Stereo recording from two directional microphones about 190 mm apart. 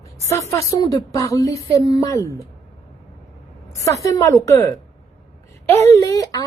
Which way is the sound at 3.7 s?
15° left (ahead or behind).